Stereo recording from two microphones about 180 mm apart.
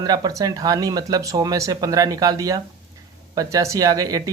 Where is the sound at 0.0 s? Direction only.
20° right (ahead or behind).